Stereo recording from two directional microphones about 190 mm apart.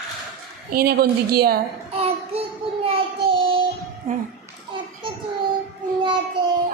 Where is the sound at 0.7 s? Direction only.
55° right (ahead or behind).